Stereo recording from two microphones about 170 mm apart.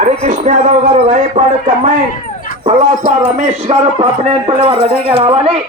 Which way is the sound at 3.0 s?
45° right (ahead or behind).